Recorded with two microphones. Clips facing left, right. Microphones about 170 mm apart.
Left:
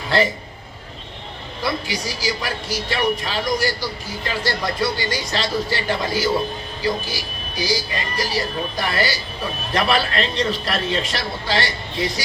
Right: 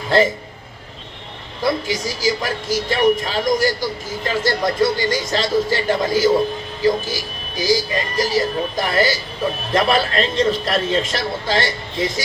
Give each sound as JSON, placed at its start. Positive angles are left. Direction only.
{"t": 1.6, "sound": "a woman's voice", "side_deg": -45}